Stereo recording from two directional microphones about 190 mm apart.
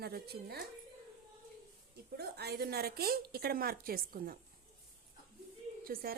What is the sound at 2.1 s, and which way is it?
A woman's voice, 55° right (ahead or behind).